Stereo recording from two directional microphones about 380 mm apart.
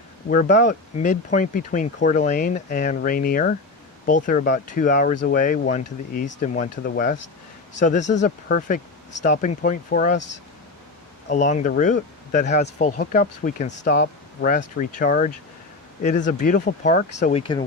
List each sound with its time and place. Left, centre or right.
0.3 s speech: centre
11.3 s speech: centre